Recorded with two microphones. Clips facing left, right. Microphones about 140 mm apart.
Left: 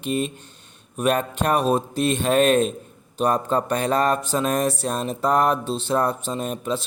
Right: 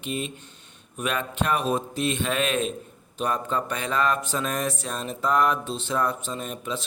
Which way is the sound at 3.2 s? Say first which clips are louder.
Left 6 dB; 40° left (ahead or behind).